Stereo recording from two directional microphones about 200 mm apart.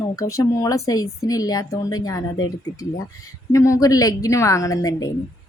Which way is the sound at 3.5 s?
15° left (ahead or behind).